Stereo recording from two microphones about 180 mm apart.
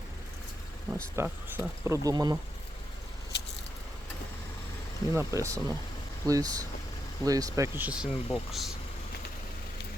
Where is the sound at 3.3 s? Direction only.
70° left (ahead or behind).